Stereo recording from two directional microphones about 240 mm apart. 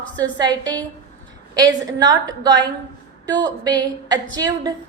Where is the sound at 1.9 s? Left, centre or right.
Centre.